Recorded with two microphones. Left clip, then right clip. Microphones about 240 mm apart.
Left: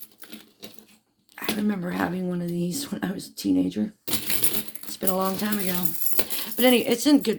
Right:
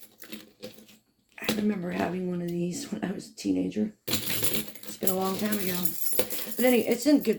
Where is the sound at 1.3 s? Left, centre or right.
Left.